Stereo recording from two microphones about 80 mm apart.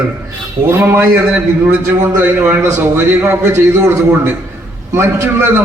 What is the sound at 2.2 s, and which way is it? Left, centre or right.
A man's voice, right.